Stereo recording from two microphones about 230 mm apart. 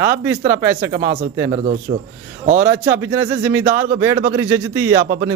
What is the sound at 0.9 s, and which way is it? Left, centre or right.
Speech, right.